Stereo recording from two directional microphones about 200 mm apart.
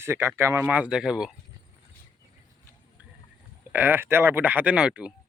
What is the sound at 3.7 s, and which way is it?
Speech, 10° right (ahead or behind).